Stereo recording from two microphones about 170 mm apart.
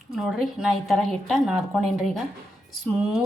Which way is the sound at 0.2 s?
Centre (ahead or behind).